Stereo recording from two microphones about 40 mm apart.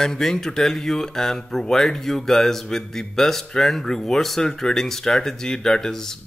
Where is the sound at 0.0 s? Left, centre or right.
Centre.